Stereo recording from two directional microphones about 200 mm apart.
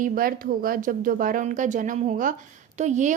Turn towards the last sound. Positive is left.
turn(degrees=-35)  # may be behind; listen again after turning